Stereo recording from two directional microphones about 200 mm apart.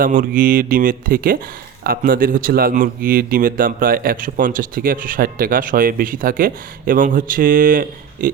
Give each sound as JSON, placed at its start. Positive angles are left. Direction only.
{"t": 0.0, "sound": "speech", "side_deg": -45}